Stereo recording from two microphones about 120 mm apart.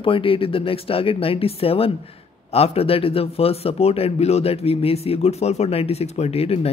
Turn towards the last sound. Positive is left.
turn(degrees=55)  # may be behind; listen again after turning